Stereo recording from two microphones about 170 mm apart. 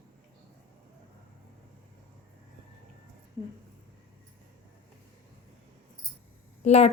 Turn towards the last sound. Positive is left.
turn(degrees=40)  # may be behind; listen again after turning